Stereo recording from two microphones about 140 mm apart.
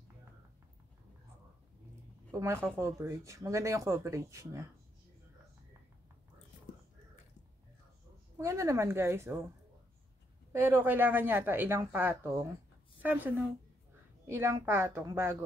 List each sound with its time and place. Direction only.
2.3 s speech: 20° right (ahead or behind)
8.4 s speech: 20° right (ahead or behind)
10.5 s a woman's voice: 20° right (ahead or behind)